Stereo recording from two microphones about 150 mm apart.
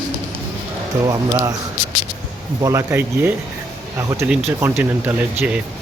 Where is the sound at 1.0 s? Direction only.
25° right (ahead or behind).